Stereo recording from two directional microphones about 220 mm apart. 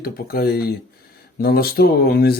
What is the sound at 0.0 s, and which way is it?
Speech, 45° left (ahead or behind).